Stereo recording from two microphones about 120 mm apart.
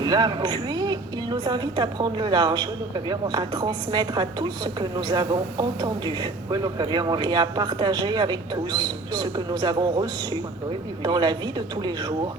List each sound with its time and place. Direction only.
0.0 s a woman's voice: 35° right (ahead or behind)